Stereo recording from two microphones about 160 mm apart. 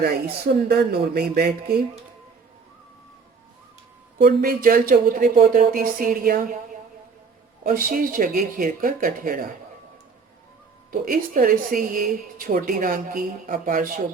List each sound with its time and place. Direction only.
0.0 s speech: 80° right
4.2 s a woman's voice: 65° right (ahead or behind)
7.6 s a woman's voice: 60° right (ahead or behind)
10.9 s a woman's voice: 60° right (ahead or behind)